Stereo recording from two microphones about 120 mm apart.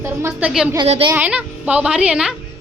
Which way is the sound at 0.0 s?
20° right (ahead or behind).